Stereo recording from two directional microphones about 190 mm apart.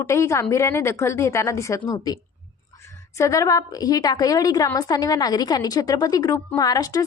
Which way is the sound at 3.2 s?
15° left (ahead or behind).